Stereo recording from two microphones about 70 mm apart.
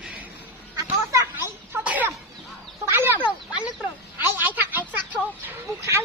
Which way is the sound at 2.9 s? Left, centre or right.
Right.